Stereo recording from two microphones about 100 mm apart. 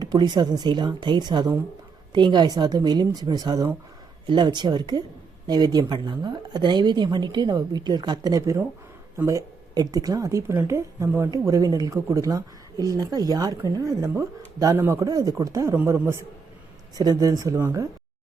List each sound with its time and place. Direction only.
0.0 s speech: 45° right (ahead or behind)
15.7 s a man's voice: 20° right (ahead or behind)
17.0 s speech: 40° right (ahead or behind)